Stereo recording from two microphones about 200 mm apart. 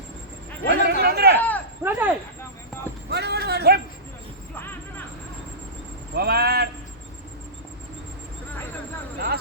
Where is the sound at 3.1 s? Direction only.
55° right (ahead or behind).